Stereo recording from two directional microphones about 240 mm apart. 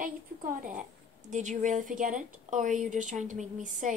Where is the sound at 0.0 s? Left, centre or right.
Right.